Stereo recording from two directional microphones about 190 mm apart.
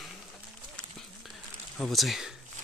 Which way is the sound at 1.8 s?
Centre (ahead or behind).